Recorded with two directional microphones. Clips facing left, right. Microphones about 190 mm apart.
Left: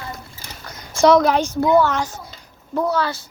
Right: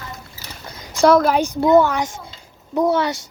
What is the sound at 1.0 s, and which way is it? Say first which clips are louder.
Speech: even; 5° right (ahead or behind).